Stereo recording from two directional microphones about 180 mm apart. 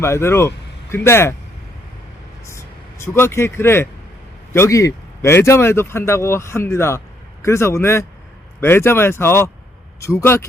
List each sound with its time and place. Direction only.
0.0 s speech: 15° left (ahead or behind)
2.5 s speech: 15° left (ahead or behind)